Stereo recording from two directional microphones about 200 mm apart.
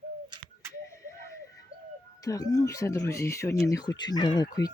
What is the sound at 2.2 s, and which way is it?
Speech, 15° left (ahead or behind).